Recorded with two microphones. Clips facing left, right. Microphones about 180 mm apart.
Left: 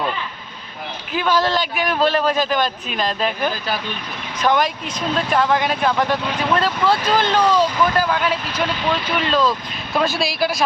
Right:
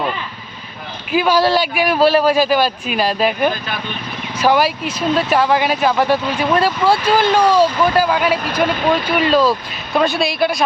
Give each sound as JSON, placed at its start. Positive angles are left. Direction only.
{"t": 1.1, "sound": "speech", "side_deg": -10}
{"t": 8.6, "sound": "speech", "side_deg": -50}
{"t": 9.1, "sound": "speech", "side_deg": -10}